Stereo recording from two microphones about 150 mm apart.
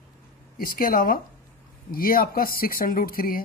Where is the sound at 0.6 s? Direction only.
75° left (ahead or behind).